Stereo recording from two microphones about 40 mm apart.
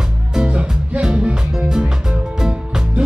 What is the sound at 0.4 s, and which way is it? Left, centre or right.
Music, right.